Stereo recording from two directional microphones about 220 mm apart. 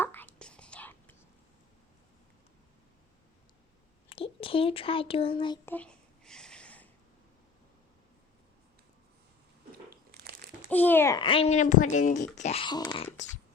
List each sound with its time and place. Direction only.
0.0 s whispering: 10° left (ahead or behind)
4.1 s speech: 25° left (ahead or behind)
5.6 s a sound: 5° left (ahead or behind)
10.1 s crumpling: 45° right (ahead or behind)
10.7 s a child's voice: 10° left (ahead or behind); by 13.4 s 30° left (ahead or behind)